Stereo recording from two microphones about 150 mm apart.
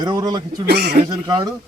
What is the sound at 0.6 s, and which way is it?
Speech, 90° right.